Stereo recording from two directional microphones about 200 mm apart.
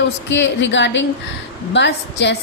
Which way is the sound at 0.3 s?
65° left (ahead or behind).